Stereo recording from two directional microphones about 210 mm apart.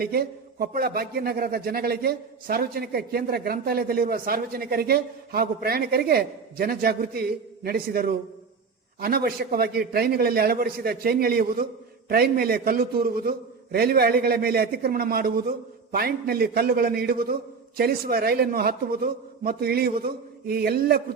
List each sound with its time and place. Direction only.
0.0 s a man's voice: 45° right (ahead or behind)